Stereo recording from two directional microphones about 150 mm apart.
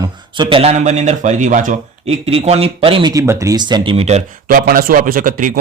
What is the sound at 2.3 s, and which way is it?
Speech, 40° right (ahead or behind).